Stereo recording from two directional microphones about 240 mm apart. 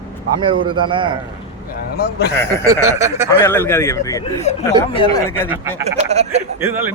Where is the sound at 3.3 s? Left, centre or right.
Centre.